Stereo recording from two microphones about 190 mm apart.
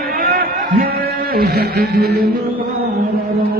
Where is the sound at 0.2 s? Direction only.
50° right (ahead or behind).